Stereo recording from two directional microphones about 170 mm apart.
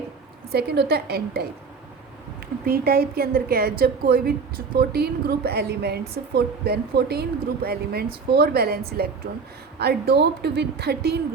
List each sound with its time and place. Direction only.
0.5 s a woman's voice: 70° right (ahead or behind)
2.6 s a woman's voice: 60° right (ahead or behind)